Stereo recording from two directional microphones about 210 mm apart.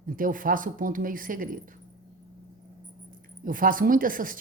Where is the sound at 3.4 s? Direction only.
40° right (ahead or behind).